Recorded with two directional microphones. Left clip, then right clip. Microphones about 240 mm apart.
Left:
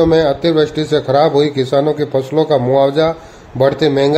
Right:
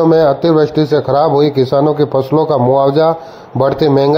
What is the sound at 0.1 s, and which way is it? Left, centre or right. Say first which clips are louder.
A man's voice: right 3 dB; centre.